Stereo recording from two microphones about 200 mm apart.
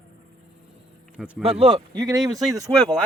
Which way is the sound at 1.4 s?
30° right (ahead or behind).